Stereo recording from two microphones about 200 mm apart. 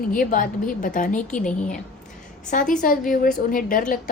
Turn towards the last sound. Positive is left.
turn(degrees=40)  # may be behind; listen again after turning